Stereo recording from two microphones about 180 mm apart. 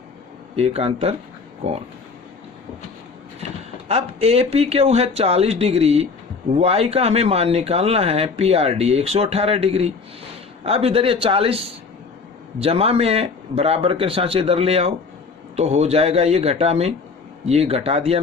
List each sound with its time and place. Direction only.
0.5 s speech: 35° right (ahead or behind)
3.8 s speech: 35° right (ahead or behind)